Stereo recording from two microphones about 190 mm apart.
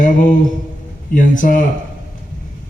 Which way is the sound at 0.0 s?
45° left (ahead or behind).